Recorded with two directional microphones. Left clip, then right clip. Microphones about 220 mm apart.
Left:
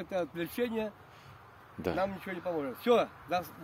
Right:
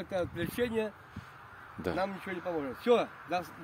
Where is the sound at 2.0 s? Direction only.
25° left (ahead or behind).